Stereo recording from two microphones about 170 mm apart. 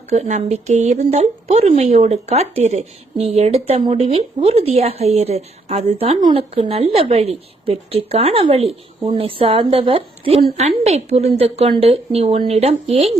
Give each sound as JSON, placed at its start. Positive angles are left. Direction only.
{"t": 0.2, "sound": "speech", "side_deg": -40}
{"t": 6.1, "sound": "speech", "side_deg": -30}